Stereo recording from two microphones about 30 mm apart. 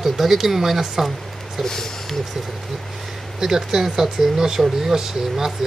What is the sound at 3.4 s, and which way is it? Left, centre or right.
Speech, centre.